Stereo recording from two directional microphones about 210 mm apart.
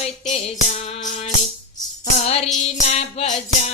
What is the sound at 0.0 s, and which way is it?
Music, 30° left (ahead or behind).